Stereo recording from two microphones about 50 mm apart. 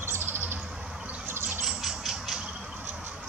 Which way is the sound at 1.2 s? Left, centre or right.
Right.